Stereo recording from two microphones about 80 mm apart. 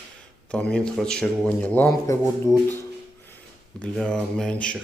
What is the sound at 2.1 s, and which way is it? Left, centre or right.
Speech, left.